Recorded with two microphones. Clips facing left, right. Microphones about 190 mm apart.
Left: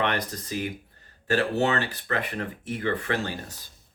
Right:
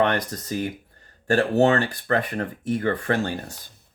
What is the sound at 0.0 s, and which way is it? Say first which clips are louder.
Speech: right 5 dB; 45° right (ahead or behind).